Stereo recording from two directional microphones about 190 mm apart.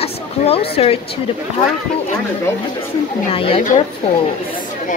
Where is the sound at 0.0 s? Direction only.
30° left (ahead or behind).